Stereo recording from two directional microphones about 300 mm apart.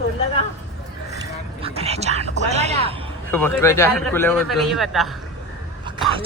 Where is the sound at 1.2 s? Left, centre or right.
Centre.